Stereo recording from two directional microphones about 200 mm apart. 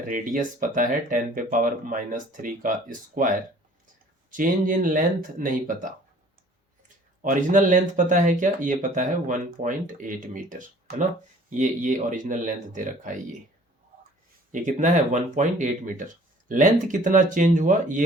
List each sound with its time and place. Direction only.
0.1 s speech: 40° right (ahead or behind)
7.2 s speech: 40° right (ahead or behind)
14.5 s speech: 40° right (ahead or behind)